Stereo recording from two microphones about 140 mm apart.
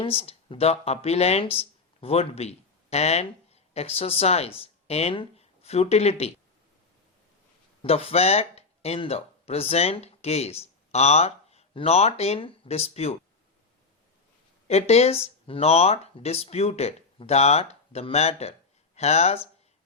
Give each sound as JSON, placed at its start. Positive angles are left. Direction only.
{"t": 0.0, "sound": "speech", "side_deg": 45}
{"t": 7.8, "sound": "speech", "side_deg": 45}
{"t": 14.7, "sound": "speech", "side_deg": 50}